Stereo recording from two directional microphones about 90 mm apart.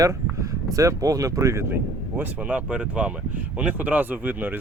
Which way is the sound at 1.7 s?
20° right (ahead or behind).